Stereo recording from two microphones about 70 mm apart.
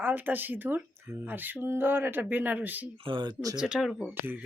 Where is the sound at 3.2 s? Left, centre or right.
Right.